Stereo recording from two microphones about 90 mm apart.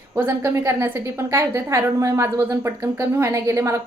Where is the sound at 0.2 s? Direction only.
25° right (ahead or behind).